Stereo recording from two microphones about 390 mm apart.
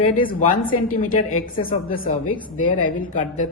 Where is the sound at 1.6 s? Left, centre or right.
Left.